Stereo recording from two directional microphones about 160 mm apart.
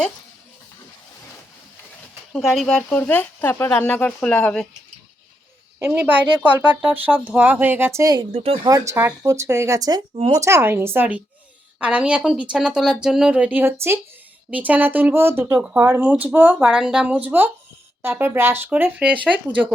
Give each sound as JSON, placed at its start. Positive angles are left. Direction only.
{"t": 2.3, "sound": "speech", "side_deg": 0}
{"t": 5.8, "sound": "speech", "side_deg": -15}
{"t": 8.3, "sound": "speech", "side_deg": -40}
{"t": 8.6, "sound": "speech", "side_deg": -20}